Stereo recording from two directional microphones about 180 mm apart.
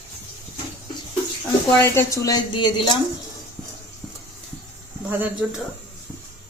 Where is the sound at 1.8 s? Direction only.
15° left (ahead or behind).